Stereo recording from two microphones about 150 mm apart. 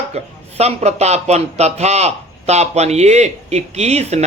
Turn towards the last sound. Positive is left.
turn(degrees=-45)  # may be behind; listen again after turning